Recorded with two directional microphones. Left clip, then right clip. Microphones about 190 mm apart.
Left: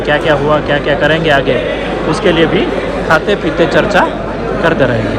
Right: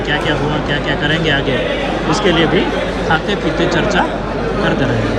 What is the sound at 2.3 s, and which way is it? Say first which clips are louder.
Speech: left 3 dB; 90° left.